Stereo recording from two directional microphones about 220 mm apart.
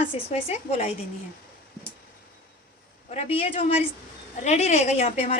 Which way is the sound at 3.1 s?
25° left (ahead or behind).